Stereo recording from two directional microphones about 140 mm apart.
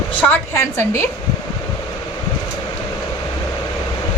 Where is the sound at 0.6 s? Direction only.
20° left (ahead or behind).